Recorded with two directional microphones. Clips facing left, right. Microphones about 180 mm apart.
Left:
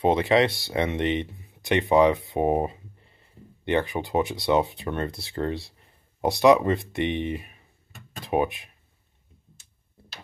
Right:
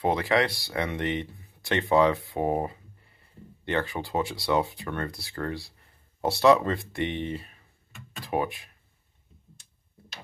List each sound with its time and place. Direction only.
0.0 s speech: 20° left (ahead or behind)